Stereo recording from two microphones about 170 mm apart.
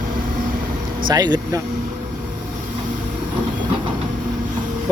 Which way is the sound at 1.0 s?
25° right (ahead or behind).